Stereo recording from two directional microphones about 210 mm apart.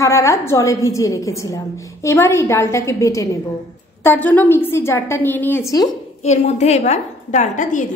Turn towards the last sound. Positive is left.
turn(degrees=35)  # may be behind; listen again after turning